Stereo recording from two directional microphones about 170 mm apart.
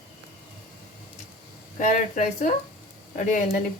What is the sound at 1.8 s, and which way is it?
Speech, 45° left (ahead or behind).